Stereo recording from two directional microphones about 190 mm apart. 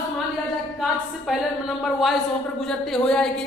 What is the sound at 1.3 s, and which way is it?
A woman's voice, 5° right (ahead or behind).